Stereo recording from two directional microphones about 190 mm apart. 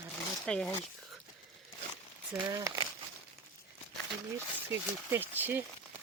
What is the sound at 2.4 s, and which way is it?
Speech, 20° right (ahead or behind).